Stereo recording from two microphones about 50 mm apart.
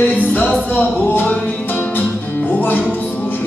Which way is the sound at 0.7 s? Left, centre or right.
Left.